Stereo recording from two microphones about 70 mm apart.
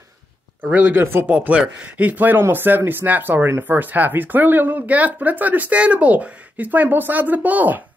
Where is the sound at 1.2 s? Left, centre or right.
Centre.